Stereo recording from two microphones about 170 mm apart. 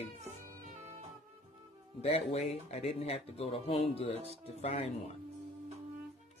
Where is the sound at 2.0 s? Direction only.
35° left (ahead or behind).